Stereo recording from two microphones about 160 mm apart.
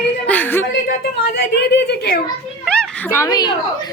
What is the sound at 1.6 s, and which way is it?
Speech, 90° left.